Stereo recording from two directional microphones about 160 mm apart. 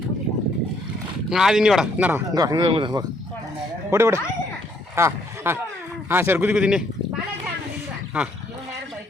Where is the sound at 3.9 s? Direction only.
15° right (ahead or behind).